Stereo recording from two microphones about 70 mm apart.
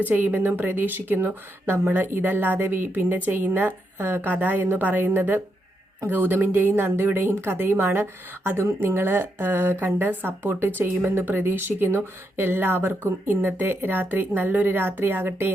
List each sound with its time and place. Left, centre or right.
0.0 s a woman's voice: right